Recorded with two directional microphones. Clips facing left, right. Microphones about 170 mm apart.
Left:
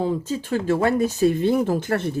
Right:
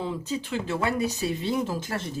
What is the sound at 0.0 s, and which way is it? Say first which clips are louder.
Speech: left 6 dB; 45° left (ahead or behind).